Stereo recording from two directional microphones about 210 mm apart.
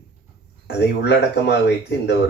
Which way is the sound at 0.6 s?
55° left (ahead or behind).